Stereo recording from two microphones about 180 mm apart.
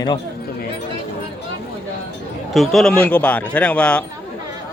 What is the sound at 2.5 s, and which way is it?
Speech, centre (ahead or behind).